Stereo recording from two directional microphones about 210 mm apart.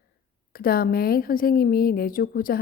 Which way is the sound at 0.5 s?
45° left (ahead or behind).